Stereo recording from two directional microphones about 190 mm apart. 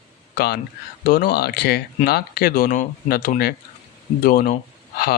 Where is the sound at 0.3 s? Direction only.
55° left (ahead or behind).